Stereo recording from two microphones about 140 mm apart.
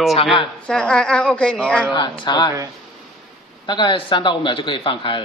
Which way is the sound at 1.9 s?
30° left (ahead or behind).